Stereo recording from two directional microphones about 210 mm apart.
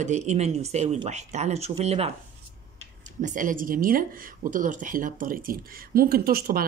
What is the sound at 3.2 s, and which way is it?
Speech, 40° right (ahead or behind).